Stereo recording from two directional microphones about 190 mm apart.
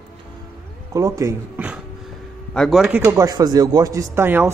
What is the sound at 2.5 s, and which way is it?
Speech, centre (ahead or behind).